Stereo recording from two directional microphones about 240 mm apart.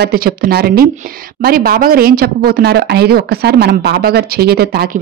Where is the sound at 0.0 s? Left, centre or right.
Right.